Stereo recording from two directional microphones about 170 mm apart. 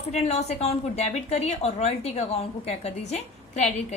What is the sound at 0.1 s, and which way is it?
A woman's voice, 40° left (ahead or behind).